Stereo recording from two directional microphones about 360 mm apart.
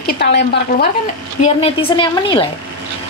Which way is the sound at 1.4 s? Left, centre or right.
Centre.